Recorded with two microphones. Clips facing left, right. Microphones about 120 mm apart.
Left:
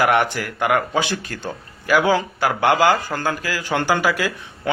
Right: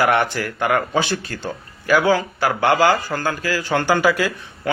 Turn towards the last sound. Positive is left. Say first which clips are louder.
# right 2 dB
turn(degrees=10)  # may be behind; listen again after turning